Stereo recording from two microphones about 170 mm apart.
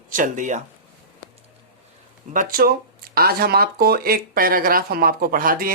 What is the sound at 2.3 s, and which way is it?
Speech, 55° right (ahead or behind).